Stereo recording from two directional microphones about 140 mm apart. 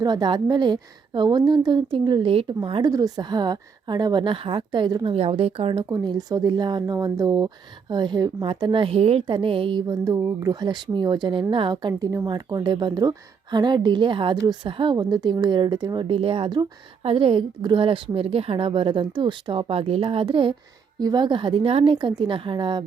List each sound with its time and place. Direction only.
0.0 s speech: 30° right (ahead or behind)
2.9 s speech: 30° right (ahead or behind)
5.1 s speech: 45° right (ahead or behind)
5.9 s speech: 25° right (ahead or behind)